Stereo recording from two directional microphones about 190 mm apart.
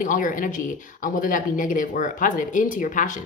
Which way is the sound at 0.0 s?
45° left (ahead or behind).